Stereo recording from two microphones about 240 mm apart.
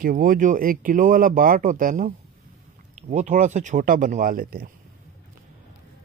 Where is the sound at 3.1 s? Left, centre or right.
Right.